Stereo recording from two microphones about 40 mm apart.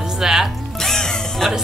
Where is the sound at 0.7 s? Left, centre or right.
Centre.